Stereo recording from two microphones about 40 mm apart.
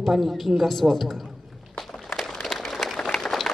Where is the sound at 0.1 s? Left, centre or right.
Centre.